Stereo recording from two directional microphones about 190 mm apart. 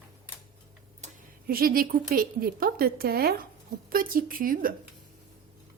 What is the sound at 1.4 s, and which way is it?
A woman's voice, 50° right (ahead or behind).